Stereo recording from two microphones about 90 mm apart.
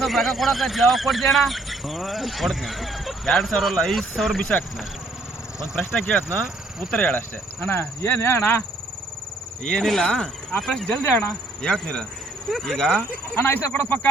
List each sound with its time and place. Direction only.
0.0 s speech: centre (ahead or behind)
5.8 s speech: 15° left (ahead or behind)
9.6 s speech: 5° left (ahead or behind)
10.8 s speech: 15° left (ahead or behind)
13.4 s speech: 20° left (ahead or behind)